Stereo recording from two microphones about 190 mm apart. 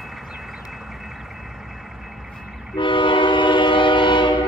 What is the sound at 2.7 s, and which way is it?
Train, 25° left (ahead or behind).